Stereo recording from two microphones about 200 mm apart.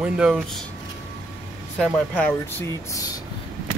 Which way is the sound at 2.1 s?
10° left (ahead or behind).